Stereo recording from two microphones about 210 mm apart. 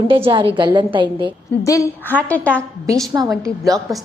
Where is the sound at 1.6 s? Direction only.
15° left (ahead or behind).